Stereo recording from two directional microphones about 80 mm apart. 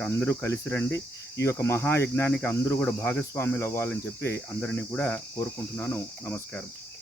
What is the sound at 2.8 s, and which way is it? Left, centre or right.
Cricket, left.